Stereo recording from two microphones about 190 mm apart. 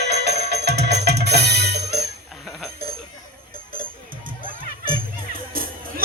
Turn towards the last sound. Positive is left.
turn(degrees=-50)  # may be behind; listen again after turning